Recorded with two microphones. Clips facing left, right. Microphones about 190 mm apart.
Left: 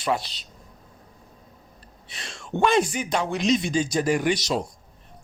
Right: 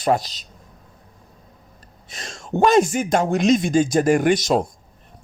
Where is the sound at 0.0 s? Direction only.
45° right (ahead or behind).